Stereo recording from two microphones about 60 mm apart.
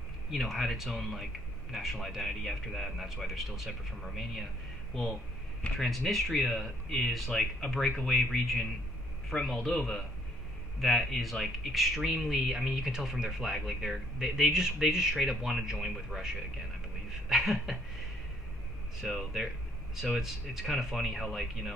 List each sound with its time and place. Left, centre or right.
0.3 s speech: centre
5.8 s speech: centre
10.8 s speech: centre
17.3 s a sound: centre
19.1 s speech: centre